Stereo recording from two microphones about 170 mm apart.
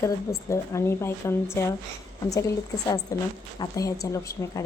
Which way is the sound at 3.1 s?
20° left (ahead or behind).